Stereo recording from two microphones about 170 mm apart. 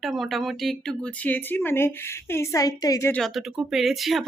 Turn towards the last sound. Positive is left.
turn(degrees=0)  # may be behind; listen again after turning